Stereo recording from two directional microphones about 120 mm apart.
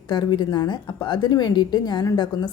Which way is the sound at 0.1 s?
40° left (ahead or behind).